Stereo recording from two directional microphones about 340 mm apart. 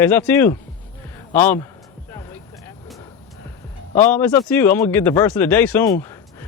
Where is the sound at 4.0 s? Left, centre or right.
Centre.